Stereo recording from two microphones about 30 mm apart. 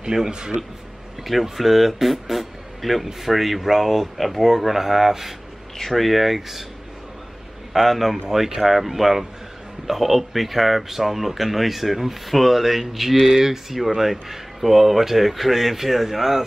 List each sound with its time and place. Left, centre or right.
0.0 s a man's voice: right
1.2 s speech: centre
7.7 s speech: centre